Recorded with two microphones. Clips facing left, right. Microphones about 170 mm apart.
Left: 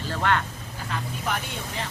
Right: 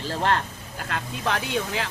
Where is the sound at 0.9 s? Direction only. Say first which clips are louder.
Right 2 dB; 90° right.